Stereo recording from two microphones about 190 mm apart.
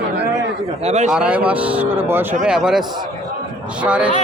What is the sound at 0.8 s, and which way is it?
Speech, 35° right (ahead or behind).